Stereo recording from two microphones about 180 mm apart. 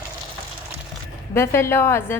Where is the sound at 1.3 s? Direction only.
15° left (ahead or behind).